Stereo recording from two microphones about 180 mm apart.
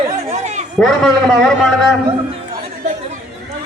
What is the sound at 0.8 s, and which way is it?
A man's voice, centre (ahead or behind).